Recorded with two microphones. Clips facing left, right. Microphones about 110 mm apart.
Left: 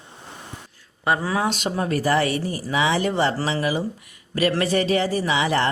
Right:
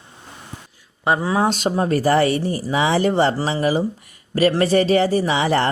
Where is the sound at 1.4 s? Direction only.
35° right (ahead or behind).